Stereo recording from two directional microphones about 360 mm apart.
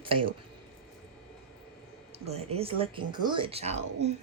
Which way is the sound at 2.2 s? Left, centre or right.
Centre.